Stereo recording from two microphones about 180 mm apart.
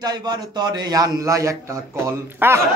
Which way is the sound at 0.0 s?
20° right (ahead or behind).